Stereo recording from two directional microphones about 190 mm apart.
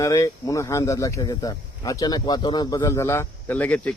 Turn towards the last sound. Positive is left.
turn(degrees=5)  # may be behind; listen again after turning